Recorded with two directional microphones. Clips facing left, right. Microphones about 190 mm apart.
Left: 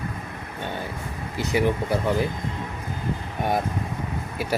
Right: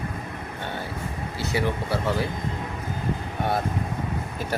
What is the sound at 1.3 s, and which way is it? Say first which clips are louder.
Speech: left 4 dB; 15° left (ahead or behind).